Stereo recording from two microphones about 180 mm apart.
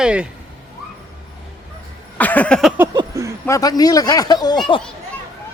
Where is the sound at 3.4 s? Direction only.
20° left (ahead or behind).